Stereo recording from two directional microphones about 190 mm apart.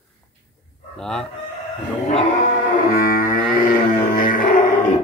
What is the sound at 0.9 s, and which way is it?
Speech, 5° left (ahead or behind).